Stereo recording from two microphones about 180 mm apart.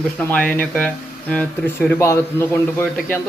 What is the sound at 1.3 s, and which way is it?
Speech, 10° left (ahead or behind).